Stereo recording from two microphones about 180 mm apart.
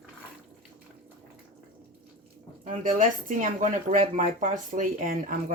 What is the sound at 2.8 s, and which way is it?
Speech, 45° right (ahead or behind).